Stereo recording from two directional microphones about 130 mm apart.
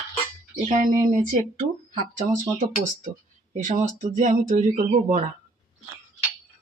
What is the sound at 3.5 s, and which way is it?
Speech, 65° right (ahead or behind).